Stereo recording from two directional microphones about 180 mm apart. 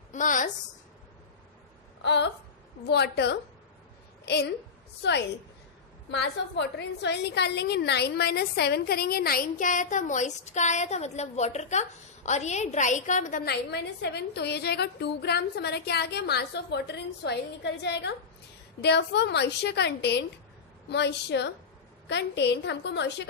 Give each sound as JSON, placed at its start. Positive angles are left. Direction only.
{"t": 0.1, "sound": "a sound", "side_deg": 45}
{"t": 2.0, "sound": "a woman's voice", "side_deg": 70}
{"t": 6.1, "sound": "a woman's voice", "side_deg": 70}
{"t": 13.5, "sound": "a woman's voice", "side_deg": 65}